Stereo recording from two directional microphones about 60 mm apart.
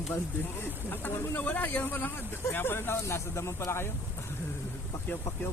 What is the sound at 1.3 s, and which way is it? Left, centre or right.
A man's voice, left.